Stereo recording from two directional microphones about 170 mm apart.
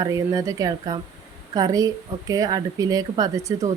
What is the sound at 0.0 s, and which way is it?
A woman's voice, 20° right (ahead or behind).